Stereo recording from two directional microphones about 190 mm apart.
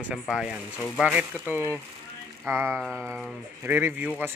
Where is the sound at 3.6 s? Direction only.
10° right (ahead or behind).